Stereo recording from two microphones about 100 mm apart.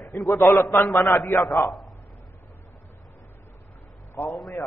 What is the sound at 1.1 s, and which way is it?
Speech, centre (ahead or behind).